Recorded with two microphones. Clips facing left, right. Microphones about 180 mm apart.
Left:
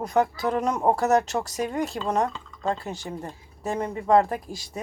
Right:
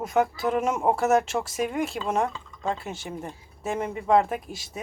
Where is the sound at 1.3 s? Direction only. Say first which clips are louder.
Even; 20° left (ahead or behind).